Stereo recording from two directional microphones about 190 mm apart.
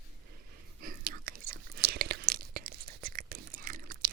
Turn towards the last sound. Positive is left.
turn(degrees=-50)  # may be behind; listen again after turning